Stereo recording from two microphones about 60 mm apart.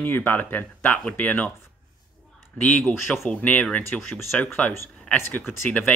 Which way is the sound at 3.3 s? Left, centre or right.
Left.